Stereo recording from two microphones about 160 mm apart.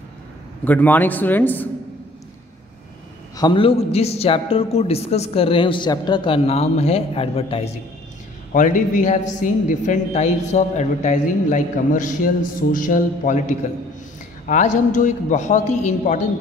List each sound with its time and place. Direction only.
0.7 s a man's voice: 10° left (ahead or behind)
3.3 s a man's voice: 30° left (ahead or behind)
8.5 s a man's voice: 55° left (ahead or behind)